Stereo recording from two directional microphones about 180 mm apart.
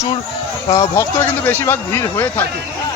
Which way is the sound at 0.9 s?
15° left (ahead or behind).